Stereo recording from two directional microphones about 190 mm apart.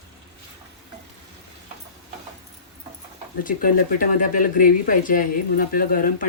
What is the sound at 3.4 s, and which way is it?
Speech, 45° left (ahead or behind).